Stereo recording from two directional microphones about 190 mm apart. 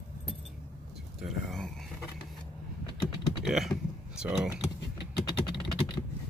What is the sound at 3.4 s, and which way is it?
Typing, centre (ahead or behind).